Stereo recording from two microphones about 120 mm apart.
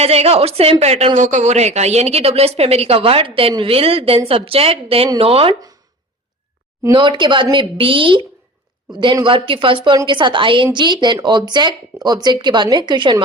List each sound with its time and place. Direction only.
0.0 s a woman's voice: 60° right (ahead or behind)
6.9 s a woman's voice: 40° right (ahead or behind)